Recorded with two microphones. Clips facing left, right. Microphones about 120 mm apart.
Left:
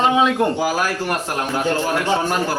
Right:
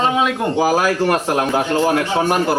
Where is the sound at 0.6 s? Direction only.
90° right.